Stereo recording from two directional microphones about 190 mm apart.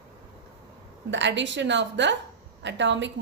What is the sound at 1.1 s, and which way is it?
A woman's voice, 70° right (ahead or behind).